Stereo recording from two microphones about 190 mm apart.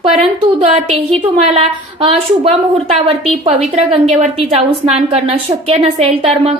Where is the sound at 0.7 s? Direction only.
35° right (ahead or behind).